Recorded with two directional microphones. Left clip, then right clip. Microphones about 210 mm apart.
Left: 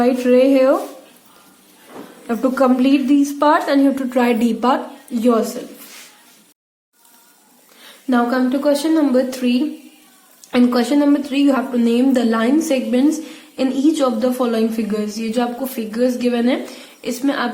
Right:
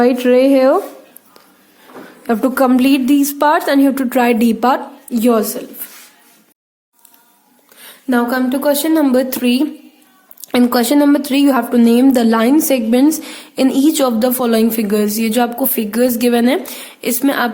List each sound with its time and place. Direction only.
0.0 s speech: 50° right (ahead or behind)
2.2 s speech: 50° right (ahead or behind)
7.9 s speech: 50° right (ahead or behind)